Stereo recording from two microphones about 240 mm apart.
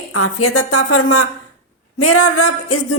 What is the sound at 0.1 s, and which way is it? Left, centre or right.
Speech, left.